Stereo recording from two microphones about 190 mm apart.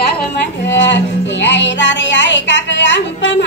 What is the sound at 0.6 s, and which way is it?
Child singing, 70° left (ahead or behind).